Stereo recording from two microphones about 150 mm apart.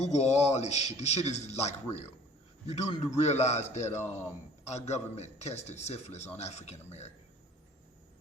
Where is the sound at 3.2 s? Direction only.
50° left (ahead or behind).